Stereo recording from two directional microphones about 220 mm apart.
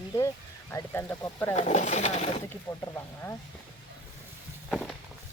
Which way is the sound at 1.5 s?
35° left (ahead or behind).